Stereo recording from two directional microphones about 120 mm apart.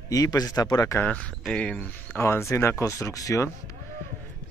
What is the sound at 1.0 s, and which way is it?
Speech, 10° left (ahead or behind).